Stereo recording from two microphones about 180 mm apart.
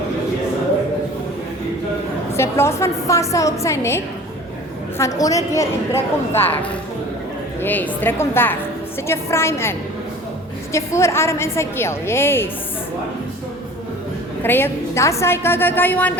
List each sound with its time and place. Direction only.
2.3 s a man's voice: 15° left (ahead or behind)
14.4 s a man's voice: 10° left (ahead or behind)